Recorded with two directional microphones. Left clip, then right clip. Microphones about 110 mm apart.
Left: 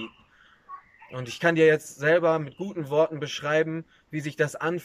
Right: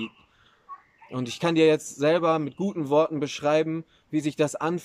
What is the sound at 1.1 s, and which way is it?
A man's voice, 35° right (ahead or behind).